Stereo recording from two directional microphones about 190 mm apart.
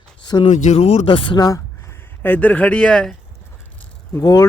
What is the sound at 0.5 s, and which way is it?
Speech, 40° left (ahead or behind).